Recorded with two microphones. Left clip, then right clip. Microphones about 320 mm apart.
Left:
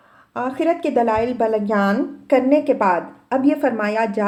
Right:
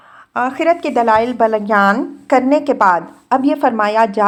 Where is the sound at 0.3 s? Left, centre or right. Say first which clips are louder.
Right 6 dB; centre.